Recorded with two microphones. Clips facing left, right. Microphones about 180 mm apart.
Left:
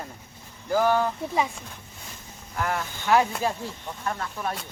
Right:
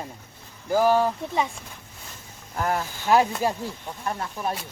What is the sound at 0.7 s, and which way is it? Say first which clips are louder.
Speech: right 2 dB; 15° right (ahead or behind).